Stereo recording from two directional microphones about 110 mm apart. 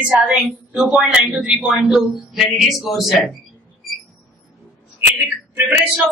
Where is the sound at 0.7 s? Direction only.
10° right (ahead or behind).